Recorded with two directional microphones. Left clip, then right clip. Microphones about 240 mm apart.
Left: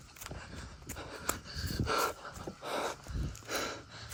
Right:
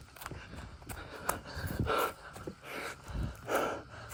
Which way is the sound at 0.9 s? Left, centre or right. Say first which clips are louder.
Left 1 dB; centre.